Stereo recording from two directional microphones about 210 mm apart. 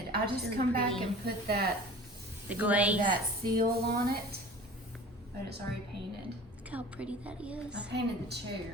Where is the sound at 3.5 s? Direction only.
45° right (ahead or behind).